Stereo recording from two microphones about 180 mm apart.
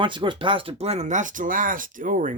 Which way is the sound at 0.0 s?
25° right (ahead or behind).